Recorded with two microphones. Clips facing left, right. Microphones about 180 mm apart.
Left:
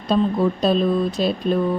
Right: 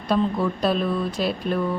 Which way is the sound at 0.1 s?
20° left (ahead or behind).